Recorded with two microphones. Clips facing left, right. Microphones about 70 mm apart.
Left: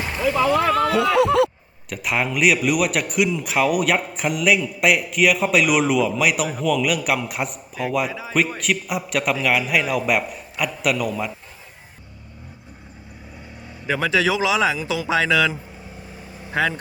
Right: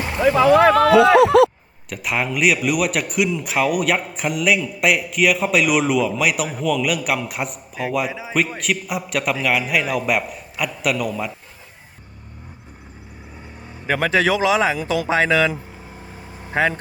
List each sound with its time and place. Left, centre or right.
0.2 s a sound: right
1.9 s speech: centre
13.8 s speech: right